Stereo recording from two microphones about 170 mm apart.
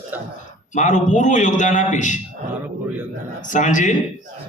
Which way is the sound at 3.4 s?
45° left (ahead or behind).